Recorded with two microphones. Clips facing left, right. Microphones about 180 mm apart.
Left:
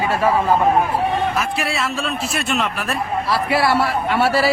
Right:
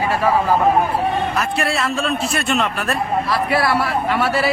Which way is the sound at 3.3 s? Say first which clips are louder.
Left 2 dB; 25° left (ahead or behind).